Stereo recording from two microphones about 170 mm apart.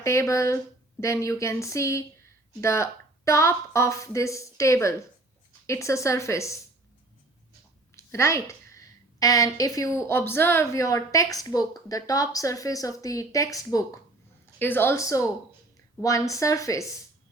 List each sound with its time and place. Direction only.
0.0 s a woman's voice: 15° left (ahead or behind)
7.9 s a woman's voice: 15° left (ahead or behind)